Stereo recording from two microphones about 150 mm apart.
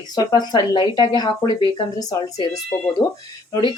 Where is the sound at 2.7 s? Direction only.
15° left (ahead or behind).